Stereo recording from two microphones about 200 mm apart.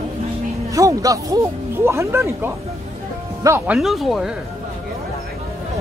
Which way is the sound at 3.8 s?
Centre (ahead or behind).